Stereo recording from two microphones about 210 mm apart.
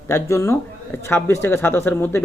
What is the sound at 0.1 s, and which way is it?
Speech, 15° left (ahead or behind).